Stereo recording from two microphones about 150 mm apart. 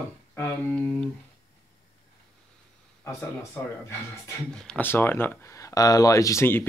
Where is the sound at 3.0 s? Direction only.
20° left (ahead or behind).